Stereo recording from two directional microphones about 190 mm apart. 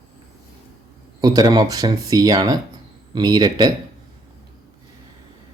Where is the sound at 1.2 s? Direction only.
20° right (ahead or behind).